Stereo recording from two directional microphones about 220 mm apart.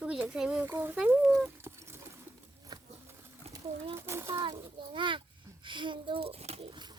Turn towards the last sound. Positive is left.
turn(degrees=-20)  # may be behind; listen again after turning